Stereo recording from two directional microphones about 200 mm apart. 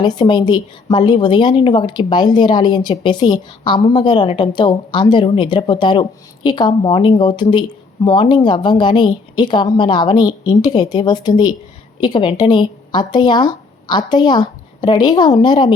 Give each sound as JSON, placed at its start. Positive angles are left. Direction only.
{"t": 0.0, "sound": "a woman's voice", "side_deg": 20}